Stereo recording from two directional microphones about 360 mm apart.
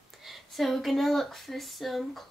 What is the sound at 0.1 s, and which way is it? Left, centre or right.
Speech, centre.